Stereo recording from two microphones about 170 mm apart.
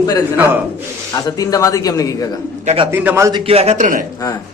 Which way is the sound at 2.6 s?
30° right (ahead or behind).